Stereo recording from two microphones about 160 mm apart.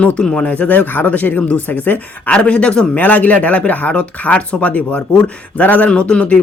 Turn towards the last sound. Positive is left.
turn(degrees=5)  # may be behind; listen again after turning